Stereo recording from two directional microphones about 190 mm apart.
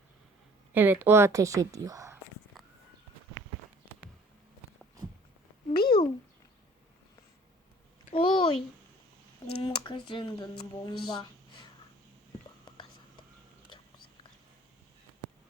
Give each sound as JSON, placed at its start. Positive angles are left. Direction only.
{"t": 0.7, "sound": "a woman's voice", "side_deg": -10}
{"t": 5.7, "sound": "a sound", "side_deg": 25}
{"t": 8.1, "sound": "speech", "side_deg": 25}
{"t": 9.6, "sound": "speech", "side_deg": 25}